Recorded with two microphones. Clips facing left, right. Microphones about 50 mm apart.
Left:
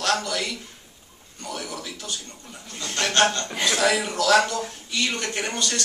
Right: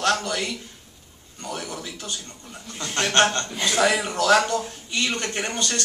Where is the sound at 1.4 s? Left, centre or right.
Right.